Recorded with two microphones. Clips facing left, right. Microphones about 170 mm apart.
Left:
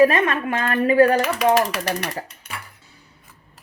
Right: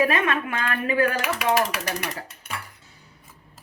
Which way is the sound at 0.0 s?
40° left (ahead or behind).